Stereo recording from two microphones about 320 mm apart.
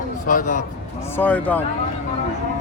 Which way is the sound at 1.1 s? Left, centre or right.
Centre.